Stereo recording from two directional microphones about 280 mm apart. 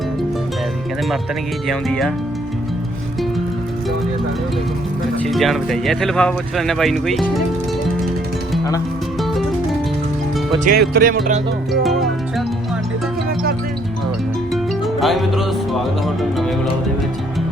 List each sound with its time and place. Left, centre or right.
1.6 s speech: centre
5.2 s speech: centre
10.7 s music: right
11.7 s speech: centre
15.0 s speech: centre